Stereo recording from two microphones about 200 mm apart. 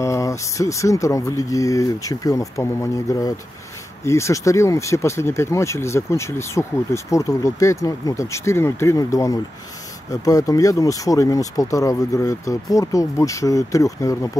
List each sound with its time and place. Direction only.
0.0 s speech: 15° left (ahead or behind)